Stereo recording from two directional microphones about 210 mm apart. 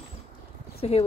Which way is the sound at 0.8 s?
30° left (ahead or behind).